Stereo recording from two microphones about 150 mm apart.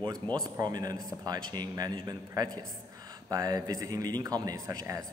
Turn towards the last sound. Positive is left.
turn(degrees=-20)  # may be behind; listen again after turning